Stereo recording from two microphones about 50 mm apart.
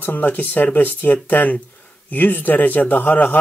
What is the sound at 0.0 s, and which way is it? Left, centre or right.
Speech, left.